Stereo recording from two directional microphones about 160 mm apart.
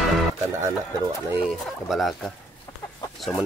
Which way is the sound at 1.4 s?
Centre (ahead or behind).